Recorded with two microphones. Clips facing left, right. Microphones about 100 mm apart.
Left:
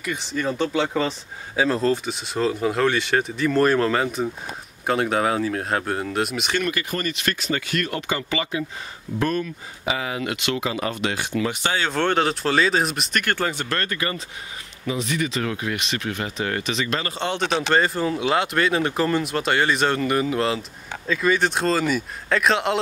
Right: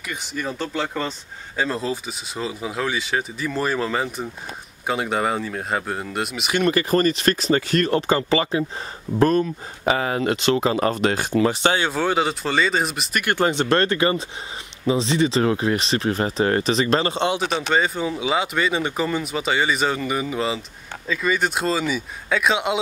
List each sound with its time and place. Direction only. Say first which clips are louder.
0.3 s speech: left 4 dB; 5° right (ahead or behind)
6.6 s speech: right 8 dB; 35° right (ahead or behind)
11.6 s speech: right 4 dB; 20° right (ahead or behind)
11.9 s speech: even; 5° right (ahead or behind)
13.2 s speech: right 7 dB; 20° right (ahead or behind); by 17.1 s 35° right (ahead or behind)
17.1 s speech: right 4 dB; 20° right (ahead or behind)
17.4 s speech: left 1 dB; 5° right (ahead or behind)